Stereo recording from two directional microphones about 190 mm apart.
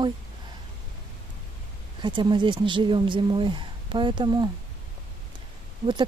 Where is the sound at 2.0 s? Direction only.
25° right (ahead or behind).